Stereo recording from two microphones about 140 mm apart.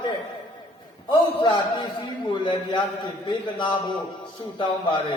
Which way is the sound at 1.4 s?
35° left (ahead or behind).